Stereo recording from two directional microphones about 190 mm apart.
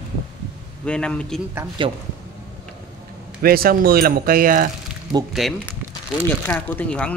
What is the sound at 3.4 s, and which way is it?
Speech, 50° right (ahead or behind).